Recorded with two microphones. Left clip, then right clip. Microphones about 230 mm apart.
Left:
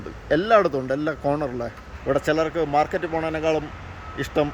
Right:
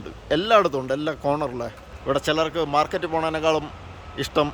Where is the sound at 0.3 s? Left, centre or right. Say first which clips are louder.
Even; centre.